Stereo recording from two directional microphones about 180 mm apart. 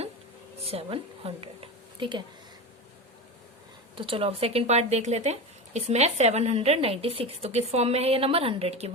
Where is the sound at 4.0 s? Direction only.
30° right (ahead or behind).